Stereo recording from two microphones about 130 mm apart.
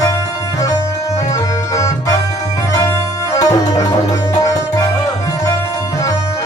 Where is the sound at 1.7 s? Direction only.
25° left (ahead or behind).